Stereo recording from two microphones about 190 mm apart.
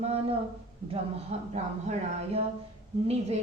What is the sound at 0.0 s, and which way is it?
A woman's voice, 30° right (ahead or behind).